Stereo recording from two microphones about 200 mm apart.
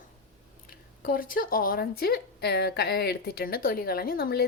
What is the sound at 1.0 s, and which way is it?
Speech, 45° left (ahead or behind).